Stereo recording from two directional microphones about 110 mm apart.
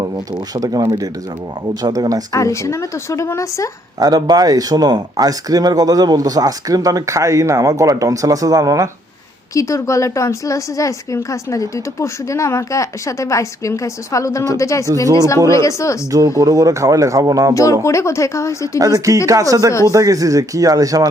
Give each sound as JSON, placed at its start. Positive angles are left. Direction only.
{"t": 0.0, "sound": "speech", "side_deg": -40}
{"t": 2.3, "sound": "speech", "side_deg": 30}
{"t": 4.0, "sound": "speech", "side_deg": -35}
{"t": 9.6, "sound": "speech", "side_deg": 30}
{"t": 16.4, "sound": "speech", "side_deg": -30}
{"t": 17.5, "sound": "speech", "side_deg": 30}
{"t": 18.8, "sound": "speech", "side_deg": -30}